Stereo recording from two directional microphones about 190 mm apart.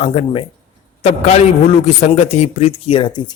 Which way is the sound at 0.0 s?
30° left (ahead or behind).